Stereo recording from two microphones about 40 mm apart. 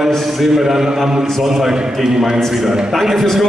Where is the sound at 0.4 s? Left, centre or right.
Centre.